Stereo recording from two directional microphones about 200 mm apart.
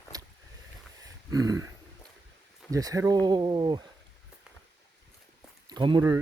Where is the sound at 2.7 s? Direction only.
15° right (ahead or behind).